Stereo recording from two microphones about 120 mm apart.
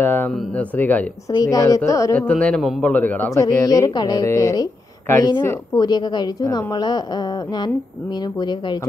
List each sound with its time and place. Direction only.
0.0 s a man's voice: 15° left (ahead or behind)
1.3 s a woman's voice: 30° left (ahead or behind)
2.1 s a man's voice: 10° left (ahead or behind)
3.3 s a woman's voice: 25° left (ahead or behind)
5.8 s a woman's voice: 35° left (ahead or behind)